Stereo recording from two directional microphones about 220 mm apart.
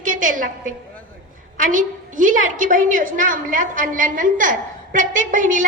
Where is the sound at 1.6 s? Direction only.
35° right (ahead or behind).